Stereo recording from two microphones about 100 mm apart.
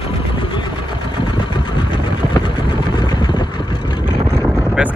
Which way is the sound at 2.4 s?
50° left (ahead or behind).